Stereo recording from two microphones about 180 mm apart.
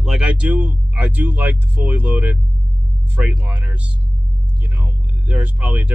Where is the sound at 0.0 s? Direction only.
5° right (ahead or behind).